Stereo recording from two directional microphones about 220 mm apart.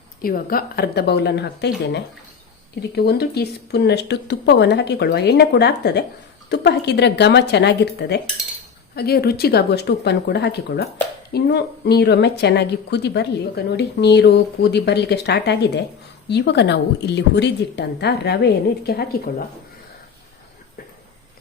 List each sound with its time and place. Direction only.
0.2 s a woman's voice: 40° left (ahead or behind)
2.9 s a woman's voice: 45° left (ahead or behind)